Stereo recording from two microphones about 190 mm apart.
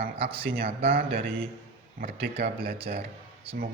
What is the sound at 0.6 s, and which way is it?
Speech, 55° right (ahead or behind).